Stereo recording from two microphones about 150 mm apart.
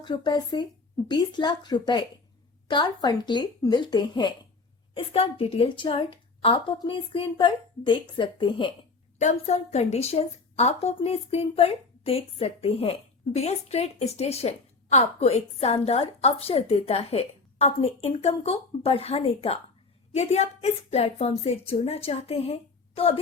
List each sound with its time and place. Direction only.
0.0 s a woman's voice: 30° left (ahead or behind)
9.1 s a woman's voice: 50° left (ahead or behind)